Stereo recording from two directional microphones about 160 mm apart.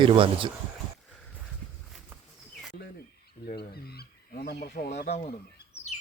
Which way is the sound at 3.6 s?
80° left.